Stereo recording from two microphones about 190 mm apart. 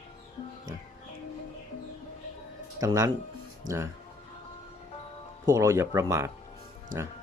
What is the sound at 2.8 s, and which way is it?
Speech, 20° right (ahead or behind).